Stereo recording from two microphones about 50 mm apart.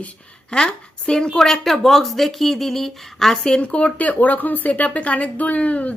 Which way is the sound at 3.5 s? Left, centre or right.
Left.